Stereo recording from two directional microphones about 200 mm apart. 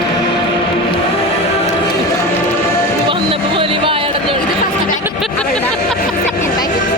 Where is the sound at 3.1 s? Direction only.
25° right (ahead or behind).